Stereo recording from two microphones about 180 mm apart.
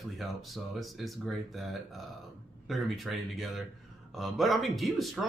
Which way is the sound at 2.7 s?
Centre (ahead or behind).